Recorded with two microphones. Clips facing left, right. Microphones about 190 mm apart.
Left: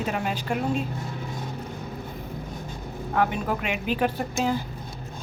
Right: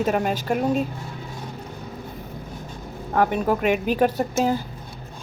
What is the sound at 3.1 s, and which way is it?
Speech, 45° right (ahead or behind).